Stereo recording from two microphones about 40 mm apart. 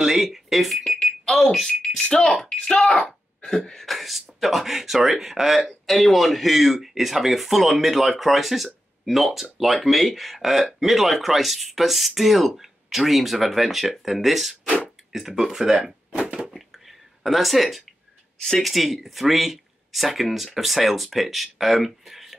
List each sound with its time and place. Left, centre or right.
0.0 s alarm clock: centre
0.7 s speech: centre
2.5 s speech: centre
16.2 s a sound: right
16.7 s a sound: centre
18.6 s speech: centre